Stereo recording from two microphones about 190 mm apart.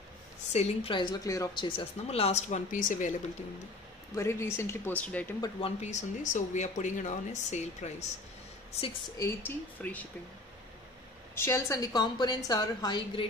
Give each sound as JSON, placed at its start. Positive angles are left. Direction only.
{"t": 0.5, "sound": "speech", "side_deg": 30}
{"t": 4.1, "sound": "speech", "side_deg": 15}
{"t": 5.4, "sound": "speech", "side_deg": 30}
{"t": 9.2, "sound": "speech", "side_deg": 10}
{"t": 11.3, "sound": "a woman's voice", "side_deg": 15}